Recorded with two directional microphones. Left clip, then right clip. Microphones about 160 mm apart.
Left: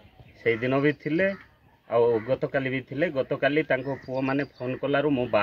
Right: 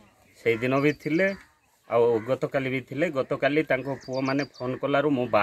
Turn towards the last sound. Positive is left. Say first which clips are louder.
# right 1 dB
turn(degrees=5)  # may be behind; listen again after turning